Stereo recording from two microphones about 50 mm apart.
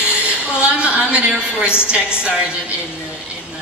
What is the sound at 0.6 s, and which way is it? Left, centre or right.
A man's voice, right.